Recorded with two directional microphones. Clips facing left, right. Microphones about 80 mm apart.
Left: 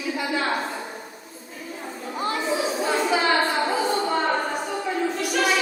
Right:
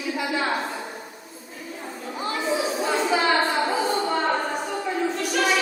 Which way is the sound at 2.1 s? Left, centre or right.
Left.